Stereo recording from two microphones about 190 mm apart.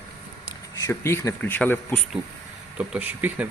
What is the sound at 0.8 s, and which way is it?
Speech, 15° left (ahead or behind).